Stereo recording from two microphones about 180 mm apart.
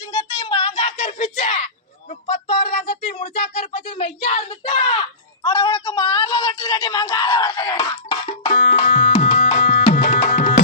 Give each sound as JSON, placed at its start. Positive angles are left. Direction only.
{"t": 0.3, "sound": "a sound", "side_deg": 30}
{"t": 2.3, "sound": "speech", "side_deg": 45}
{"t": 8.3, "sound": "tabla", "side_deg": 40}